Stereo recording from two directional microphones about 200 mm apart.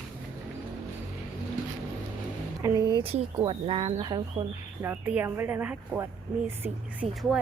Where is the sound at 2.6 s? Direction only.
20° right (ahead or behind).